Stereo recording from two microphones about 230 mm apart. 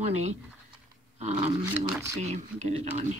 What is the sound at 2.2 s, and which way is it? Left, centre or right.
Speech, right.